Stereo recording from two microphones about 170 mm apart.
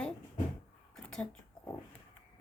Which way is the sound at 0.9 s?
5° left (ahead or behind).